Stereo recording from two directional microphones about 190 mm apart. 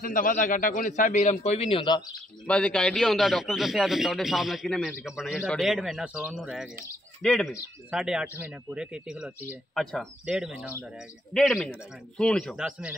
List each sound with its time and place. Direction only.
0.0 s a man's voice: 45° left (ahead or behind); by 2.0 s 25° left (ahead or behind)
2.4 s a man's voice: 5° left (ahead or behind)